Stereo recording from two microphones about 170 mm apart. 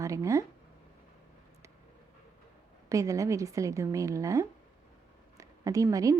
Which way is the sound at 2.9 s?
20° right (ahead or behind).